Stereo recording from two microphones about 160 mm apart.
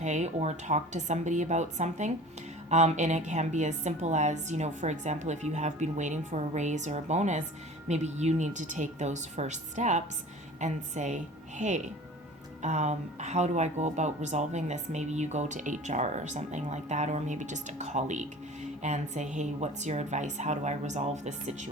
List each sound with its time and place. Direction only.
0.0 s speech: 45° right (ahead or behind)